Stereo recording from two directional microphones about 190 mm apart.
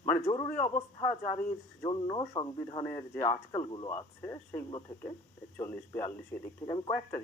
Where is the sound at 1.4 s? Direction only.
15° left (ahead or behind).